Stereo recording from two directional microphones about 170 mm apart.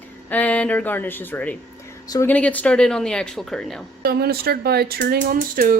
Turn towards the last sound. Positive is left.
turn(degrees=-55)  # may be behind; listen again after turning